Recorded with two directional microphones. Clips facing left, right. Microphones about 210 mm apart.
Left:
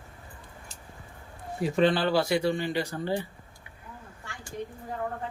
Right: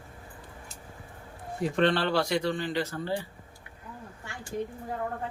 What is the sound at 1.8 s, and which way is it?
Speech, 5° left (ahead or behind).